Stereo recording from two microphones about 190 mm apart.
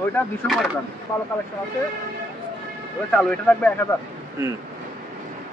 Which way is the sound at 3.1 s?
5° left (ahead or behind).